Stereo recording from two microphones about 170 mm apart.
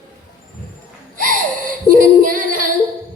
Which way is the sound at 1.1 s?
55° right (ahead or behind).